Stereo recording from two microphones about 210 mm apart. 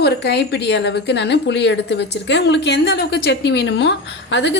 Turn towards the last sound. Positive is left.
turn(degrees=60)  # may be behind; listen again after turning